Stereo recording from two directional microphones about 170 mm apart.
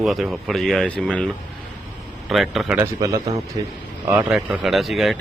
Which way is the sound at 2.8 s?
20° right (ahead or behind).